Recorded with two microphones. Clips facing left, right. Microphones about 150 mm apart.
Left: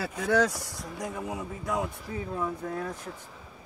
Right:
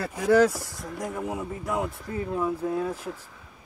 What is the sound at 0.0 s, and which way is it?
Speech, 5° right (ahead or behind).